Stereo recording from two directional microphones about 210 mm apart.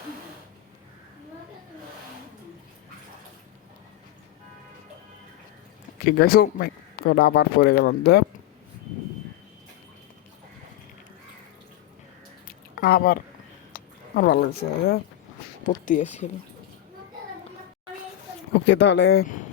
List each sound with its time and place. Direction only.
6.1 s a man's voice: 45° left (ahead or behind)
12.5 s a sound: 45° left (ahead or behind)
13.7 s speech: 45° left (ahead or behind)
18.5 s speech: 60° left (ahead or behind)